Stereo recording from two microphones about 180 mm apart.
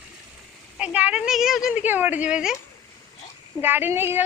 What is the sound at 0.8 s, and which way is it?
A woman's voice, 5° right (ahead or behind).